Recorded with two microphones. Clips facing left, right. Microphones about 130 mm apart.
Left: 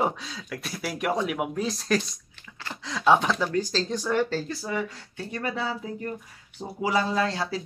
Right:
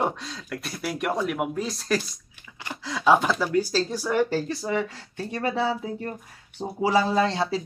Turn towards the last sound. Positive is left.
turn(degrees=-25)  # may be behind; listen again after turning